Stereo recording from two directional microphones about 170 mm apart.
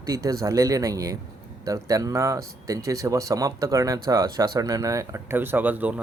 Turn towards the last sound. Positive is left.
turn(degrees=-10)  # may be behind; listen again after turning